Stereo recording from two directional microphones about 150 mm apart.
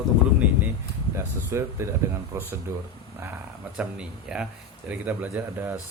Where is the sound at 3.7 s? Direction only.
5° right (ahead or behind).